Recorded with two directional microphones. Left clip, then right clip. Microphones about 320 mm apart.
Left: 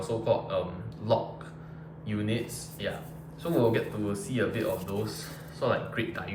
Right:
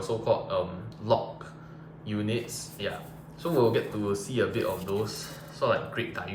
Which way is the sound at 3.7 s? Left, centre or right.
Centre.